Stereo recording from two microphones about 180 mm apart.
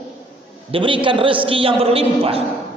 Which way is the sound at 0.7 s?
30° right (ahead or behind).